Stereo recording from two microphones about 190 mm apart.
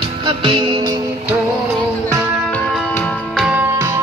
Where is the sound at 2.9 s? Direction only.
5° left (ahead or behind).